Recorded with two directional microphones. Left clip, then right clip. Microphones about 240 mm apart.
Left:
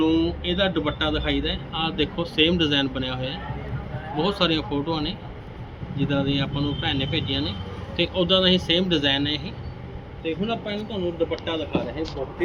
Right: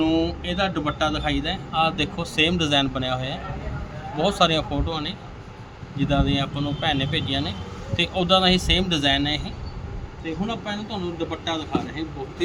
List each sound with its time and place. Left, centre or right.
0.0 s a man's voice: right